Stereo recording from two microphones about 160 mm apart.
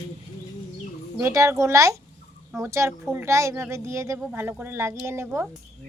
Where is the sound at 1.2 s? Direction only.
20° right (ahead or behind).